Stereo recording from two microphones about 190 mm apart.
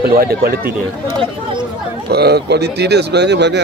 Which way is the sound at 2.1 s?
55° right (ahead or behind).